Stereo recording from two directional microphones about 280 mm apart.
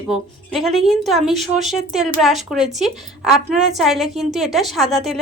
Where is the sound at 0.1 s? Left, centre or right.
Centre.